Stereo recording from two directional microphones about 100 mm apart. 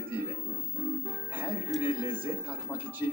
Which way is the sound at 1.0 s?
15° right (ahead or behind).